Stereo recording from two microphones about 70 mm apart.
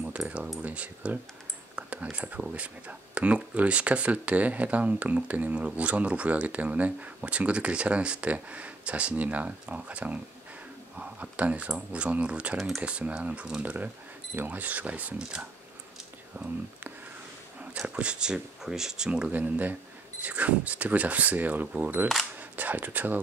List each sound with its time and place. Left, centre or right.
0.2 s speech: centre
0.6 s speech: centre
12.5 s speech: centre
12.8 s speech: centre
16.3 s speech: right
17.6 s speech: right
19.3 s speech: right
22.4 s a sound: right